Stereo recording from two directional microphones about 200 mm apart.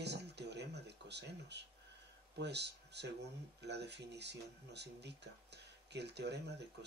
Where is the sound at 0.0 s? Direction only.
55° right (ahead or behind).